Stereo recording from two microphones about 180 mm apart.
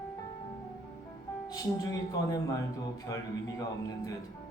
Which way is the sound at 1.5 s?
20° left (ahead or behind).